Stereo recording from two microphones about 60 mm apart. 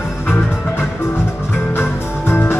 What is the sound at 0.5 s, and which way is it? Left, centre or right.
Music, left.